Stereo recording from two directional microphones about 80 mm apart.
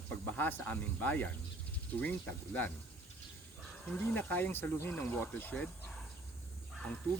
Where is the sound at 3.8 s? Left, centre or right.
Centre.